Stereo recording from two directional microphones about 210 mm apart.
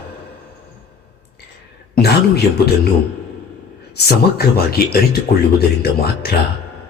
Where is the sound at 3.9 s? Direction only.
50° left (ahead or behind).